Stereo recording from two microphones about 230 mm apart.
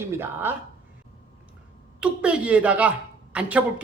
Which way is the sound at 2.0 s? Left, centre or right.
Centre.